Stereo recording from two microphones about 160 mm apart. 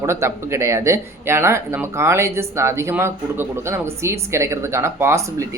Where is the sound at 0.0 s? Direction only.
15° right (ahead or behind).